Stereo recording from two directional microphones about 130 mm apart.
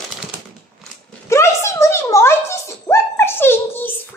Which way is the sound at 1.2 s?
20° left (ahead or behind).